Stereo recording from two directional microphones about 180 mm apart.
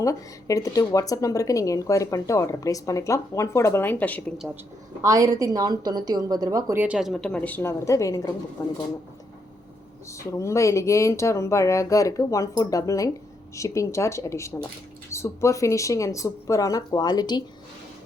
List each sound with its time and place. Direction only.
0.0 s a woman's voice: 20° left (ahead or behind)
5.0 s a woman's voice: 20° right (ahead or behind); by 8.7 s 15° left (ahead or behind)
10.1 s a woman's voice: 15° left (ahead or behind)